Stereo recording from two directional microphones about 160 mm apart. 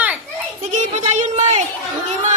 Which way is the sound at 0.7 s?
45° right (ahead or behind).